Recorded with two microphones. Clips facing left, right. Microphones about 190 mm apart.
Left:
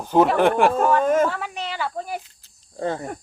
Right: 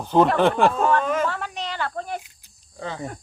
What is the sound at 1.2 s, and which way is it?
Cricket, 5° left (ahead or behind).